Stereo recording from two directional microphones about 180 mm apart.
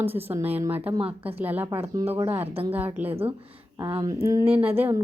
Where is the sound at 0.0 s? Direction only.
10° right (ahead or behind).